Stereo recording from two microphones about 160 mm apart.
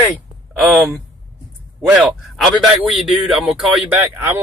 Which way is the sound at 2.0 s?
Centre (ahead or behind).